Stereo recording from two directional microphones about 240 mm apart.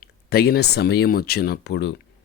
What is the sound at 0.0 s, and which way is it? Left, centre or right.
Speech, left.